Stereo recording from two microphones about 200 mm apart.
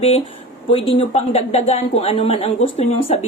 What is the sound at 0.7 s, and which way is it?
A woman's voice, 30° left (ahead or behind).